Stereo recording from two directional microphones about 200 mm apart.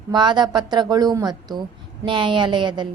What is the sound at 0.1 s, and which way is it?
A woman's voice, 20° right (ahead or behind).